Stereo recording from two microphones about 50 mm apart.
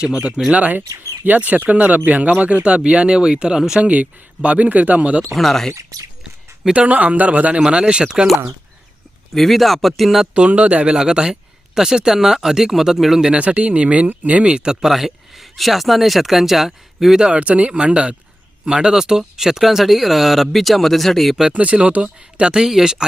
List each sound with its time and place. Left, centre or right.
0.0 s speech: centre
3.8 s speech: right
5.3 s speech: centre
6.7 s speech: right
9.3 s speech: centre
10.3 s speech: right
10.9 s speech: centre
13.3 s speech: right; by 17.3 s centre
17.3 s speech: right; by 21.3 s centre
21.5 s speech: right
22.6 s speech: centre